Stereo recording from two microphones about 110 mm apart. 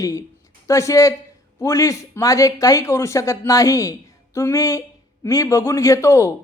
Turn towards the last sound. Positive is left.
turn(degrees=25)  # may be behind; listen again after turning